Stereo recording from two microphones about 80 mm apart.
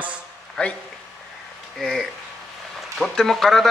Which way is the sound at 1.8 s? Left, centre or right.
Centre.